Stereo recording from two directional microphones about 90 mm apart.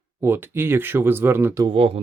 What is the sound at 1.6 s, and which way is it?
Speech, 90° right.